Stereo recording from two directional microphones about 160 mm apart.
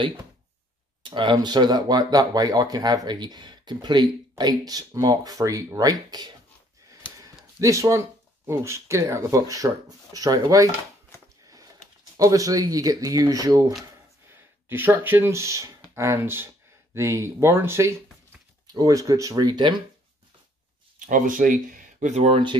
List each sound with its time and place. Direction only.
1.0 s speech: 30° right (ahead or behind)
7.2 s a sound: 20° right (ahead or behind)
8.5 s speech: 15° right (ahead or behind)
11.4 s a sound: 20° right (ahead or behind)
12.2 s speech: 20° right (ahead or behind)
21.0 s speech: 55° right (ahead or behind)